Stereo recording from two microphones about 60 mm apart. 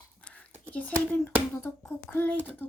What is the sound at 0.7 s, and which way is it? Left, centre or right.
Speech, left.